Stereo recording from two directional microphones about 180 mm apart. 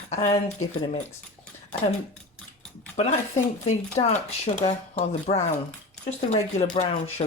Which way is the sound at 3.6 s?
40° left (ahead or behind).